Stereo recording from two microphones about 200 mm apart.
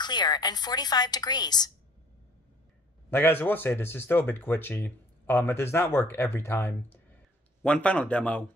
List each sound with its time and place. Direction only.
0.0 s a woman's voice: 20° left (ahead or behind)
3.1 s speech: 10° left (ahead or behind)